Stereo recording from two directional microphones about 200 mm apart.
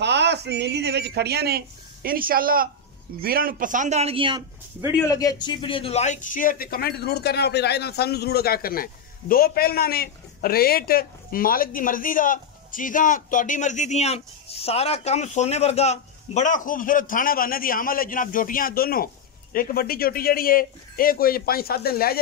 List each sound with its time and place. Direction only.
0.0 s a man's voice: 60° right (ahead or behind); by 4.4 s 25° right (ahead or behind)
5.0 s a man's voice: 20° left (ahead or behind); by 22.2 s 50° left (ahead or behind)